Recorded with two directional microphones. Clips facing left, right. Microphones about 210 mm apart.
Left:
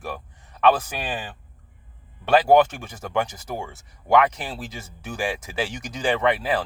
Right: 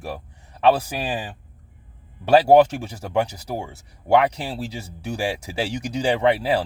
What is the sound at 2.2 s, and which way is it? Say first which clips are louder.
Speech: right 3 dB; 35° right (ahead or behind).